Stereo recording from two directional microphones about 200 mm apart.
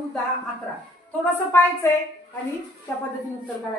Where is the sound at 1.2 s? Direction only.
10° left (ahead or behind).